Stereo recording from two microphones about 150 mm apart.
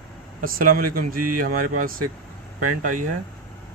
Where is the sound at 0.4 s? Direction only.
70° right (ahead or behind).